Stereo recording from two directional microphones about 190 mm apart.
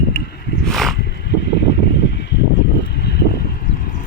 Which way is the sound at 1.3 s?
65° left (ahead or behind).